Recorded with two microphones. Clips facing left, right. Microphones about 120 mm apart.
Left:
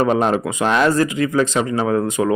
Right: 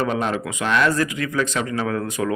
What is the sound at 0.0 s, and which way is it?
A man's voice, 35° left (ahead or behind).